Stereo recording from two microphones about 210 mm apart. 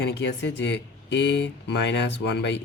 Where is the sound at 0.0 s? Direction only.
55° left (ahead or behind).